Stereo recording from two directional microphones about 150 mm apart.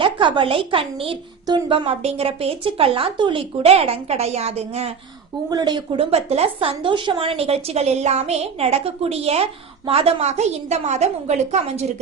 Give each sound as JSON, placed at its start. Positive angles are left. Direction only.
{"t": 0.0, "sound": "a woman's voice", "side_deg": -35}
{"t": 5.5, "sound": "a woman's voice", "side_deg": -25}